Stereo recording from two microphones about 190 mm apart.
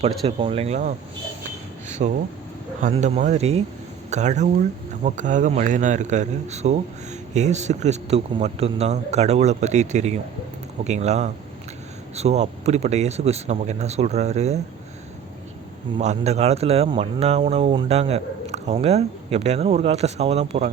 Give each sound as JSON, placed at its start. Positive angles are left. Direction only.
{"t": 0.3, "sound": "a man's voice", "side_deg": -30}
{"t": 2.0, "sound": "a man's voice", "side_deg": -40}
{"t": 16.0, "sound": "a man's voice", "side_deg": -35}